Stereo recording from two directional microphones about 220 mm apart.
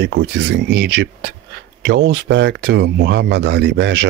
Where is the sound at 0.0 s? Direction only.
55° right (ahead or behind).